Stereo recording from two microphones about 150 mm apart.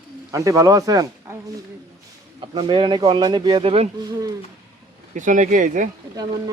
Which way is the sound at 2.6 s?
35° right (ahead or behind).